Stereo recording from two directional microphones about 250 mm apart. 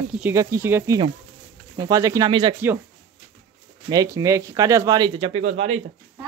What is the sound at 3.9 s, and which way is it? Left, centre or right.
Speech, centre.